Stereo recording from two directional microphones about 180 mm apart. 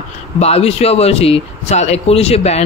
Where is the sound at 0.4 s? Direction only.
35° left (ahead or behind).